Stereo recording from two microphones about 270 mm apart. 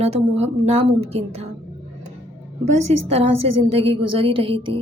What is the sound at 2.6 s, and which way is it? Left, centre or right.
Speech, right.